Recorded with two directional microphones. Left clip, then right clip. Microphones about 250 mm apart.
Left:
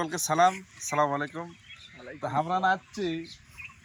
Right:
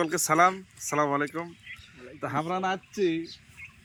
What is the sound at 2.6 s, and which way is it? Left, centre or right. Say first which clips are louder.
Speech: left 4 dB; centre.